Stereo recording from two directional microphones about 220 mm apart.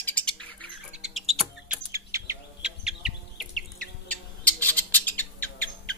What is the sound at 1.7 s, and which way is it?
Chirp, 15° right (ahead or behind).